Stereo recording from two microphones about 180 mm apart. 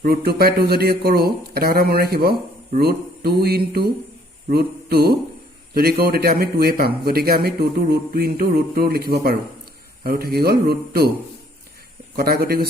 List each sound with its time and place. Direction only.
0.0 s a man's voice: 60° right (ahead or behind)
4.4 s mantra: 60° right (ahead or behind)
5.7 s a man's voice: 60° right (ahead or behind)
12.1 s a man's voice: 60° right (ahead or behind)